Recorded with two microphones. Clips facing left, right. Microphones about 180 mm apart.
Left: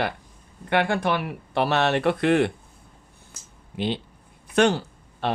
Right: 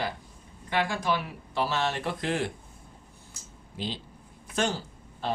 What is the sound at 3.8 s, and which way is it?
Speech, 65° left (ahead or behind).